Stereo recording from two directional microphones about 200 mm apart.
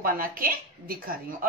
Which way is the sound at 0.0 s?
45° right (ahead or behind).